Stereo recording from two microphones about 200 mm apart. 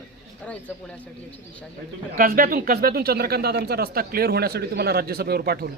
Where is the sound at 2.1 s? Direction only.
45° right (ahead or behind).